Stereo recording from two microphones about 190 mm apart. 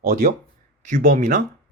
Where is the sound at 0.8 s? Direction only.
40° right (ahead or behind).